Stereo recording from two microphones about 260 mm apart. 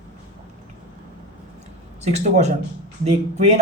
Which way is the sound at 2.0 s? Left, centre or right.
Right.